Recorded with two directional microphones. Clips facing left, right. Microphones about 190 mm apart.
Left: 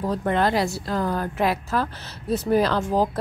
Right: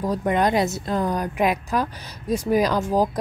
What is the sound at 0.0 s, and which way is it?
A woman's voice, 10° right (ahead or behind).